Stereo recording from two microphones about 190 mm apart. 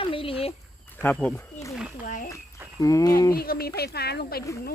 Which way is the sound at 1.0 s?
10° left (ahead or behind).